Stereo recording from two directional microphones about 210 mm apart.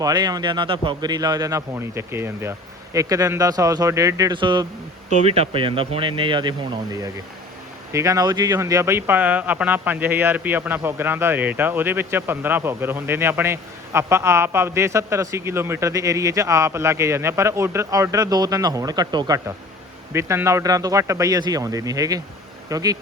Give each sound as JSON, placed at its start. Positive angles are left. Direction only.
{"t": 0.0, "sound": "speech", "side_deg": -20}
{"t": 7.9, "sound": "speech", "side_deg": -15}